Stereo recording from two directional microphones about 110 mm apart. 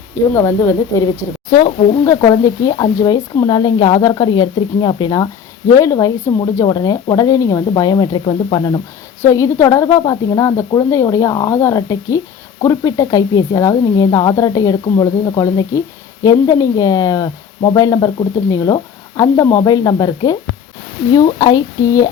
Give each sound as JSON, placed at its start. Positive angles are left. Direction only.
{"t": 0.3, "sound": "speech", "side_deg": 25}
{"t": 2.2, "sound": "speech", "side_deg": 35}
{"t": 9.2, "sound": "speech", "side_deg": 25}